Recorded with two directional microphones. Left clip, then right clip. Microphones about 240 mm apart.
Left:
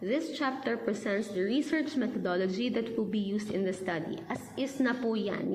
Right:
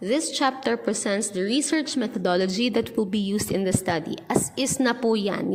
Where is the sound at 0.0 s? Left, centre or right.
Right.